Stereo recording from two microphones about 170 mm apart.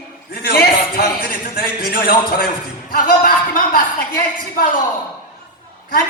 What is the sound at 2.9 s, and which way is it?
Speech, 55° left (ahead or behind).